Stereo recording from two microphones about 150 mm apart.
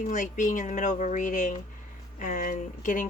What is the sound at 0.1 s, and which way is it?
Speech, 55° left (ahead or behind).